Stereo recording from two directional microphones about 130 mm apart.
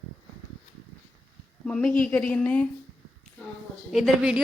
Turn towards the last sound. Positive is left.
turn(degrees=-5)  # may be behind; listen again after turning